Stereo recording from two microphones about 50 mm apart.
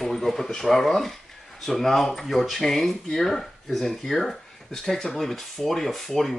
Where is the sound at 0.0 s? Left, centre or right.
Centre.